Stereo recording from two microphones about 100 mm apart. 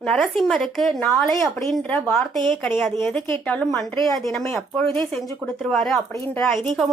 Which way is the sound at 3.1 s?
15° left (ahead or behind).